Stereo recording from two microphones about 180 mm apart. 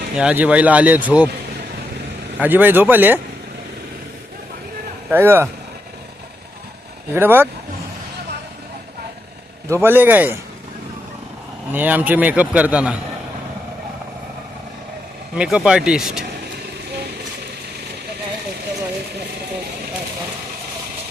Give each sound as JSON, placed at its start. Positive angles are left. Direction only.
{"t": 0.2, "sound": "a man's voice", "side_deg": -5}
{"t": 2.4, "sound": "a man's voice", "side_deg": -10}
{"t": 5.1, "sound": "a man's voice", "side_deg": -10}
{"t": 7.1, "sound": "a man's voice", "side_deg": -10}
{"t": 9.6, "sound": "a man's voice", "side_deg": -15}
{"t": 11.7, "sound": "a man's voice", "side_deg": -10}
{"t": 15.4, "sound": "speech", "side_deg": -5}